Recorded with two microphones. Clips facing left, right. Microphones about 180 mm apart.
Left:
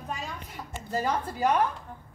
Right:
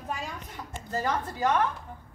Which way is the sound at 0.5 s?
10° left (ahead or behind).